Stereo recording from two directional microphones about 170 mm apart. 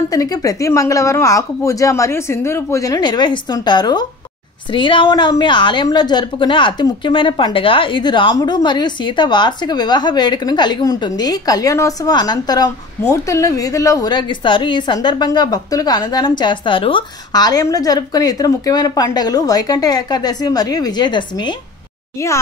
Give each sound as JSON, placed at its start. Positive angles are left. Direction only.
{"t": 0.1, "sound": "a woman's voice", "side_deg": 20}